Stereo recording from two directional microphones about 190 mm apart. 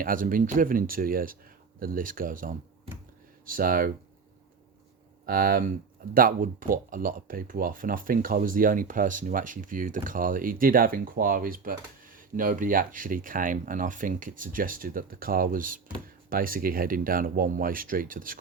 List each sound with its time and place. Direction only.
0.0 s speech: 45° right (ahead or behind)
5.2 s speech: 50° right (ahead or behind)